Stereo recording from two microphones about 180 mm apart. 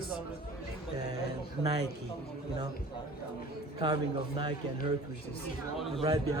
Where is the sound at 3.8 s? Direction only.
25° right (ahead or behind).